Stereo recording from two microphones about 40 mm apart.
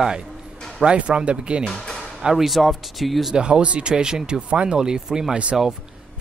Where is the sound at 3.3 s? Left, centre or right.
Right.